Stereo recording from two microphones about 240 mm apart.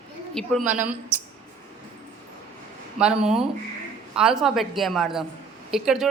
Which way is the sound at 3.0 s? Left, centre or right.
Centre.